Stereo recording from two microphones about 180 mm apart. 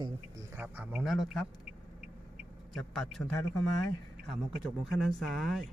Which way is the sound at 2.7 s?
Centre (ahead or behind).